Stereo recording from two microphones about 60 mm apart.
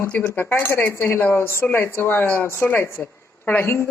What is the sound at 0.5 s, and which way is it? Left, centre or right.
A woman's voice, left.